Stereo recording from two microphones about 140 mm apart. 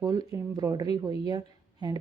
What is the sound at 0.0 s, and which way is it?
Speech, 25° right (ahead or behind).